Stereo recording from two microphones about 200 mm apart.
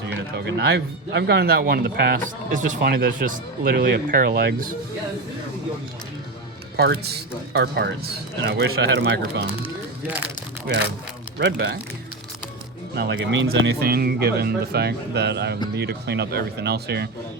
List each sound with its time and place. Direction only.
0.3 s speech: 60° right (ahead or behind)
6.7 s speech: 55° right (ahead or behind)
9.5 s speech: 10° right (ahead or behind)
11.3 s speech: 55° right (ahead or behind)
13.0 s speech: 60° right (ahead or behind)